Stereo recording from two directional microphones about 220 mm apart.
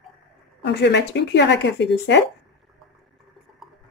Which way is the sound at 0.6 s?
50° left (ahead or behind).